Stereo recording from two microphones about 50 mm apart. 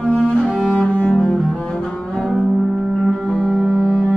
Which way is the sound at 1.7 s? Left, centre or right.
Centre.